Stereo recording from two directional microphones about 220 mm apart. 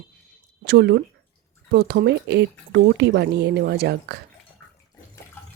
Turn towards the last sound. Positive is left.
turn(degrees=-45)  # may be behind; listen again after turning